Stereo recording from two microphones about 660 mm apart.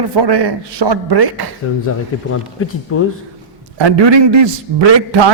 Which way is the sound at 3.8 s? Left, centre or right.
Right.